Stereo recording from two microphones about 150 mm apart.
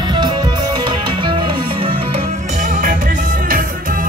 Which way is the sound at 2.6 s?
60° right (ahead or behind).